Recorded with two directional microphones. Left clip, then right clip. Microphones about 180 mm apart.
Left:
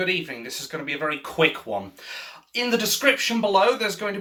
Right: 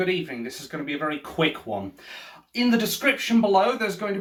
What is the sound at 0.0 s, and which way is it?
Speech, 5° left (ahead or behind).